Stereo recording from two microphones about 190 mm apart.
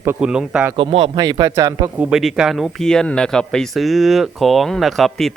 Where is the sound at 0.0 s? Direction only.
10° right (ahead or behind).